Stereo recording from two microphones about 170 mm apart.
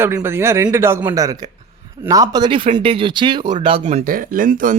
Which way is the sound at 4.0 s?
55° right (ahead or behind).